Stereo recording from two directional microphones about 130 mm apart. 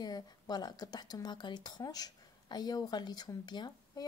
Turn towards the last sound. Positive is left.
turn(degrees=35)  # may be behind; listen again after turning